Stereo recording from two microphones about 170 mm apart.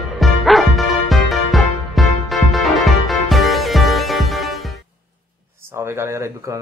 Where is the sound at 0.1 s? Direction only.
Centre (ahead or behind).